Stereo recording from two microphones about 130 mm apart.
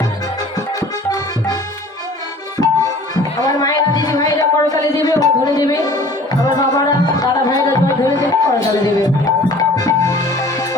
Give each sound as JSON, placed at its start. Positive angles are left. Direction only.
{"t": 0.8, "sound": "music", "side_deg": 25}
{"t": 3.4, "sound": "a sound", "side_deg": 30}
{"t": 6.6, "sound": "music", "side_deg": 30}